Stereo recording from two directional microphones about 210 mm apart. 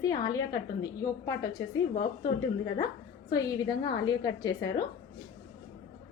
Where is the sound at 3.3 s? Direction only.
20° left (ahead or behind).